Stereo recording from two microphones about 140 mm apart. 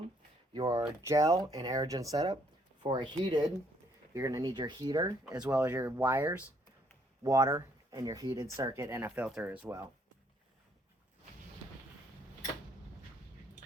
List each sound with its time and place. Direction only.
0.5 s speech: 25° right (ahead or behind)
5.5 s speech: 15° right (ahead or behind)